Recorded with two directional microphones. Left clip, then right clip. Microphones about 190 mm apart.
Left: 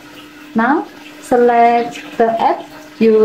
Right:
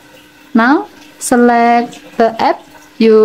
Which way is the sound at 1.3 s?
45° right (ahead or behind).